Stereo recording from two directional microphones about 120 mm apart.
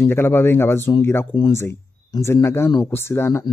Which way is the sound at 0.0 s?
20° left (ahead or behind).